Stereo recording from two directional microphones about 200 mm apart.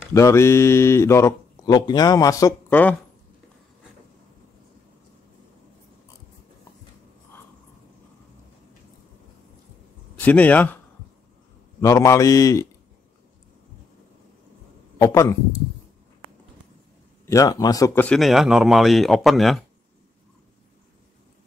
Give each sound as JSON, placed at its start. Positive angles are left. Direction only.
{"t": 0.1, "sound": "speech", "side_deg": 15}
{"t": 10.1, "sound": "speech", "side_deg": 5}
{"t": 11.8, "sound": "speech", "side_deg": 15}
{"t": 15.0, "sound": "speech", "side_deg": 15}
{"t": 17.3, "sound": "speech", "side_deg": 15}